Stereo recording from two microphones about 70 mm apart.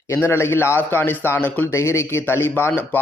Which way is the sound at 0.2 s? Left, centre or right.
Left.